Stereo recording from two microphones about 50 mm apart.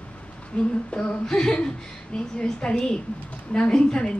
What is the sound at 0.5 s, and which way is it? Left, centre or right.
A woman's voice, centre.